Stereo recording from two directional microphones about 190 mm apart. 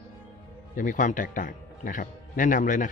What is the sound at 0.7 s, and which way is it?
Speech, 45° left (ahead or behind).